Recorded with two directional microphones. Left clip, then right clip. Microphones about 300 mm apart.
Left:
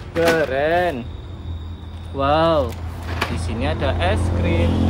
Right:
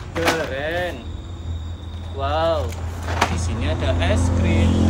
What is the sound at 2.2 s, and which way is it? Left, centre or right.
Speech, centre.